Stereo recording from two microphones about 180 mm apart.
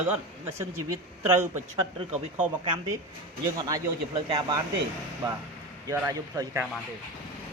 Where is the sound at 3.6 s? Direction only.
20° right (ahead or behind).